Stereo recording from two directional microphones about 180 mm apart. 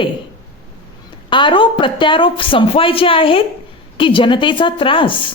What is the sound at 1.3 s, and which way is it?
A woman's voice, 25° left (ahead or behind).